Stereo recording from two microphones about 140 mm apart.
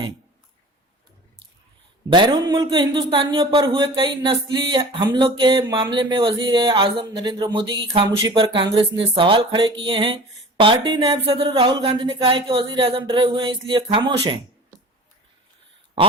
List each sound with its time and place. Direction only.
2.0 s speech: 35° right (ahead or behind)